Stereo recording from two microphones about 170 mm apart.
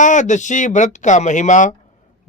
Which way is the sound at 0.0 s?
45° left (ahead or behind).